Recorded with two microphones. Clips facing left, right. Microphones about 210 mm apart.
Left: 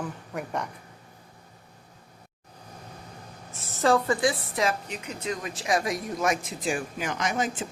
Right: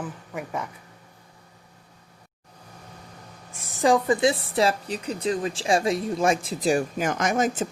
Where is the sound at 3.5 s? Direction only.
15° right (ahead or behind).